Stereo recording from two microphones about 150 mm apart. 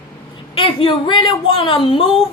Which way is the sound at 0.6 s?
35° left (ahead or behind).